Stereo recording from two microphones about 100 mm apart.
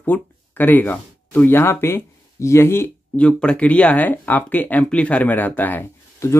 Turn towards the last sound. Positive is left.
turn(degrees=20)  # may be behind; listen again after turning